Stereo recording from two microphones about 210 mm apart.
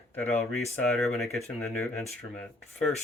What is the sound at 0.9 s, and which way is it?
Speech, centre (ahead or behind).